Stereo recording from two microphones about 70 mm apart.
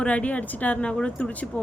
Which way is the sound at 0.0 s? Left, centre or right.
Centre.